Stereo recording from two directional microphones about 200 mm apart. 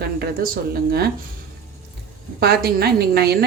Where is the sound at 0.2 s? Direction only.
45° right (ahead or behind).